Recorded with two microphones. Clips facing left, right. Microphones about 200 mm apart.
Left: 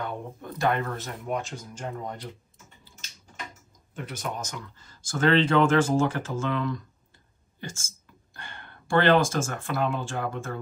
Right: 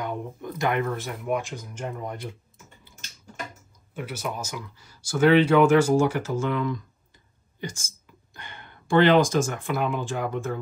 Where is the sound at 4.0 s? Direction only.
5° right (ahead or behind).